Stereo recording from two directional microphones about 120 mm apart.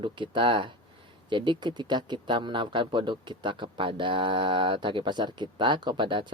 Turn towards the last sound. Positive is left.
turn(degrees=-40)  # may be behind; listen again after turning